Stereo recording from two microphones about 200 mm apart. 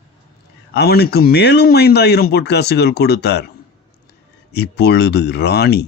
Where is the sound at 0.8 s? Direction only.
50° left (ahead or behind).